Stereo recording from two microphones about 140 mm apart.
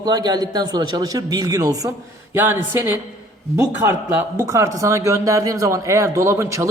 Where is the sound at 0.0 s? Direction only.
30° right (ahead or behind).